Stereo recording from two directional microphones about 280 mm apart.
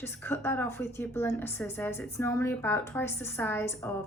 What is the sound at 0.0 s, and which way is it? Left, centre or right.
Speech, centre.